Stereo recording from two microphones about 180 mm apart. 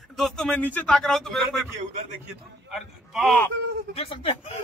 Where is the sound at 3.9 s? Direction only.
35° left (ahead or behind).